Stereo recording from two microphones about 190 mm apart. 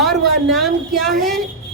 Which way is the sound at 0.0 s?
Centre (ahead or behind).